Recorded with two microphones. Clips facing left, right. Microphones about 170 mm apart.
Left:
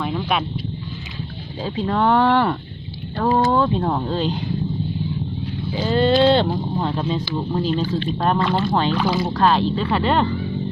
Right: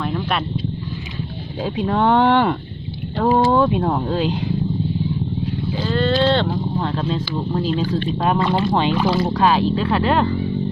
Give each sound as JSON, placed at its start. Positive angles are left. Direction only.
{"t": 0.0, "sound": "a sound", "side_deg": 0}
{"t": 1.6, "sound": "speech", "side_deg": -15}
{"t": 5.7, "sound": "speech", "side_deg": 20}